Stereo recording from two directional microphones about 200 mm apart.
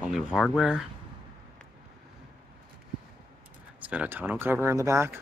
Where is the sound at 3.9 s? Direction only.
10° right (ahead or behind).